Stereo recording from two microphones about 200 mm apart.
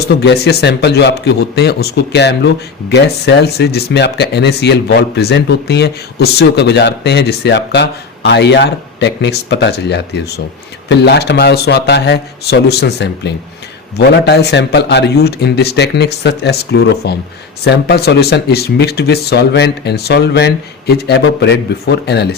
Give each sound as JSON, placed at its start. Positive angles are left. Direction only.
{"t": 0.2, "sound": "speech", "side_deg": 55}